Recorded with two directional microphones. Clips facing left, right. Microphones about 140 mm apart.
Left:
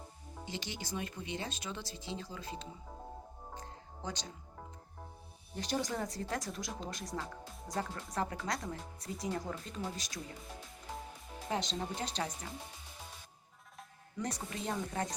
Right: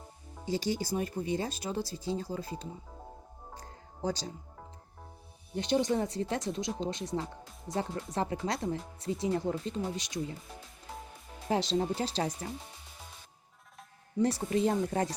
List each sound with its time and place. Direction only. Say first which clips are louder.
0.4 s speech: right 11 dB; 35° right (ahead or behind)
3.6 s music: right 11 dB; 35° right (ahead or behind)
5.5 s speech: right 8 dB; 25° right (ahead or behind)
11.4 s speech: right 8 dB; 35° right (ahead or behind)
14.2 s speech: right 12 dB; 30° right (ahead or behind)